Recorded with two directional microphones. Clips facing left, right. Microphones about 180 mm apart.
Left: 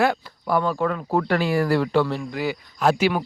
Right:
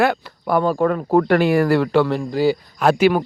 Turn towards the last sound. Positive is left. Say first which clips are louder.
# right 5 dB
turn(degrees=-50)  # may be behind; listen again after turning